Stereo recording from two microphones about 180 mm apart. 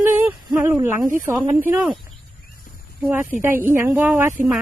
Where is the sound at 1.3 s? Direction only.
10° right (ahead or behind).